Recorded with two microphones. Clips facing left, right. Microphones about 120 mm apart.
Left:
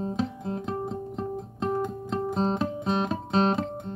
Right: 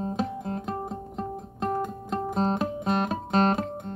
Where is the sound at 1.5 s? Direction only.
50° right (ahead or behind).